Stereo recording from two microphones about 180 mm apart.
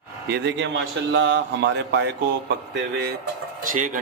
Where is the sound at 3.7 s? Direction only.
50° right (ahead or behind).